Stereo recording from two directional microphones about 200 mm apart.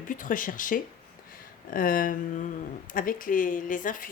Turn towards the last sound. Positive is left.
turn(degrees=40)  # may be behind; listen again after turning